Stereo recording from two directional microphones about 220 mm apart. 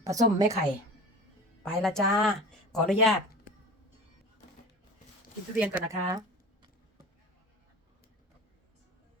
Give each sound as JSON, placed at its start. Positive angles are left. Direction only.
{"t": 0.0, "sound": "a woman's voice", "side_deg": -15}
{"t": 1.6, "sound": "speech", "side_deg": 0}
{"t": 5.5, "sound": "a woman's voice", "side_deg": -5}
{"t": 6.1, "sound": "a sound", "side_deg": -20}